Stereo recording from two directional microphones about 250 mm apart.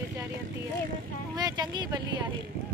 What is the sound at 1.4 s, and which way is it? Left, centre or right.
Speech, centre.